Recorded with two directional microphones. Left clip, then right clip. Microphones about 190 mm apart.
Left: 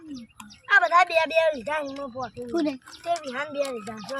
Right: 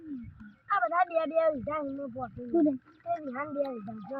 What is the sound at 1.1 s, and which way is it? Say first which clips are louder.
Speech: left 5 dB; 20° left (ahead or behind).